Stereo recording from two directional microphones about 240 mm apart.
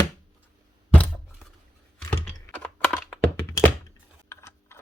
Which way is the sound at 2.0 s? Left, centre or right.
Centre.